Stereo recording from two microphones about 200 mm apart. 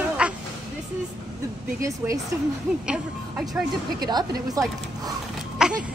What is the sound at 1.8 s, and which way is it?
Speech, 15° right (ahead or behind).